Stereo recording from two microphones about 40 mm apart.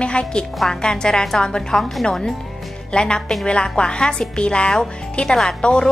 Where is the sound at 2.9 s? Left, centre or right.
Left.